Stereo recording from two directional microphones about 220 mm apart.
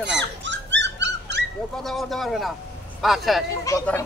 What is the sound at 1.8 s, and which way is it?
Speech, centre (ahead or behind).